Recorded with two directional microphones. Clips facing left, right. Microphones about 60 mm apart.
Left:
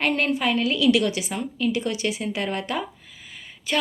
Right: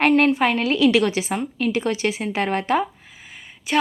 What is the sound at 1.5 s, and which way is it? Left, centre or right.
Speech, right.